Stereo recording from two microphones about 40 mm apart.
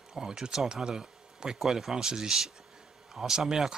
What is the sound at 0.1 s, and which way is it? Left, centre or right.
Speech, centre.